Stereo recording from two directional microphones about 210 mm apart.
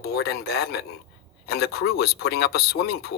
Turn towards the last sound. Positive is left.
turn(degrees=50)  # may be behind; listen again after turning